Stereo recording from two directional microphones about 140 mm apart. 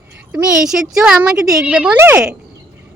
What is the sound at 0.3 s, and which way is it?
A woman's voice, 5° right (ahead or behind).